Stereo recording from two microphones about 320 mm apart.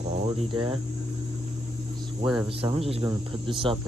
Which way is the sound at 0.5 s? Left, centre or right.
Centre.